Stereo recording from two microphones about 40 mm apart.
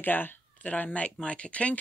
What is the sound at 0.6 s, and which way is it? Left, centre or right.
Speech, left.